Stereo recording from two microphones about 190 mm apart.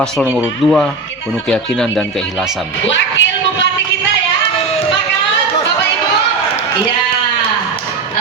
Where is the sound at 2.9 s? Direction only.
75° left (ahead or behind).